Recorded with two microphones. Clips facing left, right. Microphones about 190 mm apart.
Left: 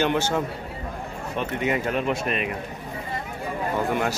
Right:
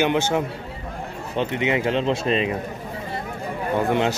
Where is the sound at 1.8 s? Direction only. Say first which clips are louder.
Right 3 dB; 25° right (ahead or behind).